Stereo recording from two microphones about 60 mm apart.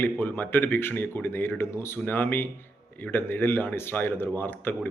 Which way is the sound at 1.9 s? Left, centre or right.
Left.